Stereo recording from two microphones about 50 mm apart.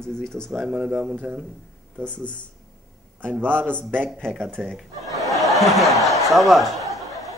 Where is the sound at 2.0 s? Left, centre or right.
Left.